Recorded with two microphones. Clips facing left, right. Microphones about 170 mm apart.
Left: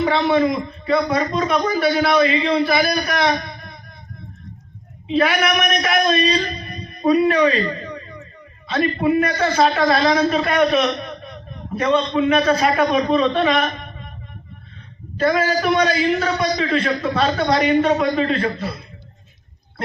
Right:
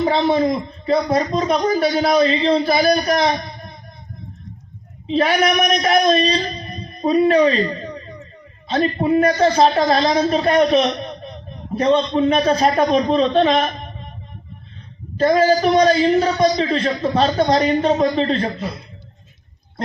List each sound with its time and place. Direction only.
0.0 s a man's voice: 30° right (ahead or behind)
5.0 s a man's voice: 30° right (ahead or behind)
8.6 s a man's voice: 30° right (ahead or behind)
15.2 s a man's voice: 35° right (ahead or behind)